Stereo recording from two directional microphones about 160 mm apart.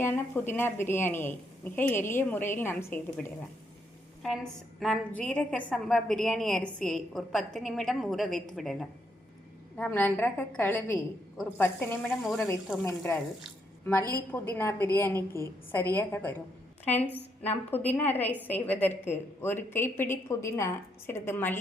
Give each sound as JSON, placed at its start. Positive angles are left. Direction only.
{"t": 0.0, "sound": "a woman's voice", "side_deg": 15}
{"t": 4.2, "sound": "a woman's voice", "side_deg": 0}
{"t": 12.2, "sound": "a woman's voice", "side_deg": 0}
{"t": 14.1, "sound": "a woman's voice", "side_deg": 15}
{"t": 17.7, "sound": "a woman's voice", "side_deg": 10}